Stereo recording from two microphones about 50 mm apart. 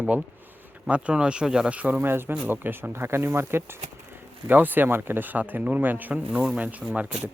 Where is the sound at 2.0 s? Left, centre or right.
Right.